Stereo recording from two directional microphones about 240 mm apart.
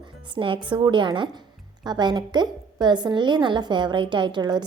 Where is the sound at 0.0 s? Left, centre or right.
Centre.